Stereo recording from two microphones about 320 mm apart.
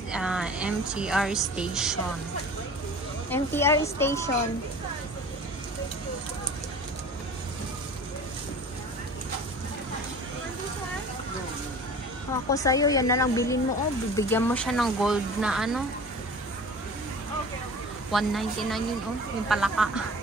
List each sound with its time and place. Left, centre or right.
0.1 s speech: centre
3.3 s a woman's voice: centre
12.4 s a woman's voice: centre
18.1 s speech: centre